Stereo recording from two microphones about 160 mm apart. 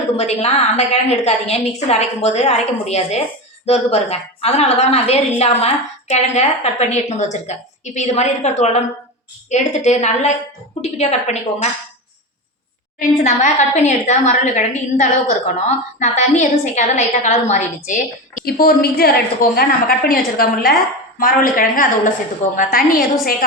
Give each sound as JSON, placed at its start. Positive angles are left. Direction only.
{"t": 0.2, "sound": "a woman's voice", "side_deg": 45}
{"t": 13.0, "sound": "a woman's voice", "side_deg": 50}